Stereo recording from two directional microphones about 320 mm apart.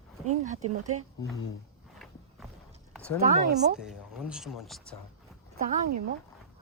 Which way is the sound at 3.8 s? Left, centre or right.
Centre.